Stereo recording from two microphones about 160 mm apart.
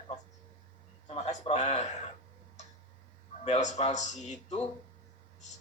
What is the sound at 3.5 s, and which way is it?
Speech, 45° left (ahead or behind).